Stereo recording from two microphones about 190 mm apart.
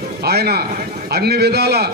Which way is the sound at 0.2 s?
55° right (ahead or behind).